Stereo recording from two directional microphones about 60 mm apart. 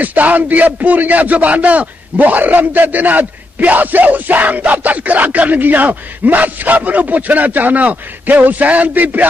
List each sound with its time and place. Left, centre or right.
0.0 s speech: right